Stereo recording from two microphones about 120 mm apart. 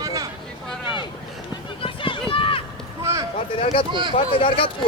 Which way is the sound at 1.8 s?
45° left (ahead or behind).